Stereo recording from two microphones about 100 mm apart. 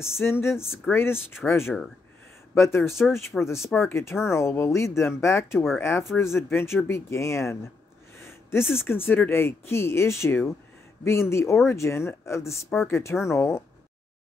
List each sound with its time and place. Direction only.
0.2 s speech: 25° left (ahead or behind)
8.2 s a sound: 25° left (ahead or behind)
8.8 s speech: 20° left (ahead or behind)